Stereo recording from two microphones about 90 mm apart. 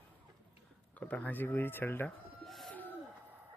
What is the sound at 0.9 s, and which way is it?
Speech, 15° left (ahead or behind).